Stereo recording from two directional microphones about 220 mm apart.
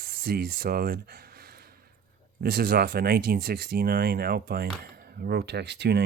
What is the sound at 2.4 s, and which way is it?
Speech, 45° right (ahead or behind).